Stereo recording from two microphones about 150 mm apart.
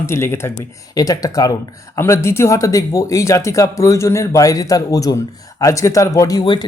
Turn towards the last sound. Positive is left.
turn(degrees=30)  # may be behind; listen again after turning